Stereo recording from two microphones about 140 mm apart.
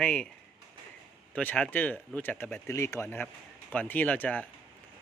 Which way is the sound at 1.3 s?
10° left (ahead or behind).